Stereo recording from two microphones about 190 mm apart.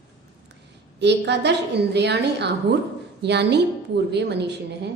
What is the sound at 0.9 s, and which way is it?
A woman's voice, 65° right (ahead or behind).